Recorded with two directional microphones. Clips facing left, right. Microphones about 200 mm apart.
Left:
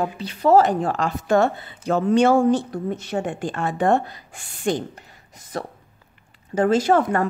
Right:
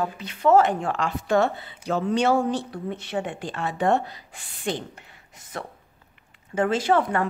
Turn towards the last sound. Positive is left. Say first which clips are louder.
# left 4 dB
turn(degrees=45)  # may be behind; listen again after turning